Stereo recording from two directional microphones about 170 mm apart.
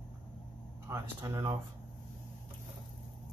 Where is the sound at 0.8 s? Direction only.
15° right (ahead or behind).